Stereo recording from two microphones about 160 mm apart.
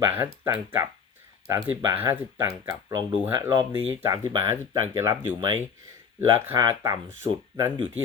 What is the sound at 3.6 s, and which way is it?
Speech, 25° right (ahead or behind).